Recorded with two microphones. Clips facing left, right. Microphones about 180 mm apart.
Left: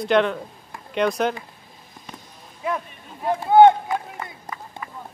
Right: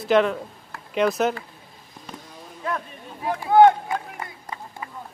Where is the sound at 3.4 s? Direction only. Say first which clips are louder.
Left 2 dB; 25° left (ahead or behind).